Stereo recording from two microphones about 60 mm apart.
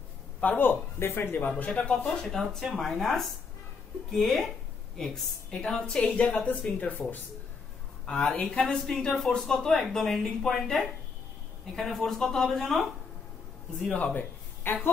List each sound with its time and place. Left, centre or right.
0.4 s a man's voice: left
1.6 s a woman's voice: left
2.0 s a woman's voice: centre; by 7.2 s left
8.1 s speech: centre
14.1 s a sound: left